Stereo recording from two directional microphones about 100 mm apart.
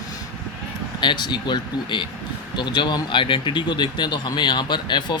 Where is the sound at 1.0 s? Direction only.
50° left (ahead or behind).